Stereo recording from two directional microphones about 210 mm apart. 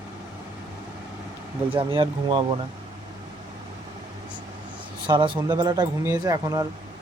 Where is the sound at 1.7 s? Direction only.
25° right (ahead or behind).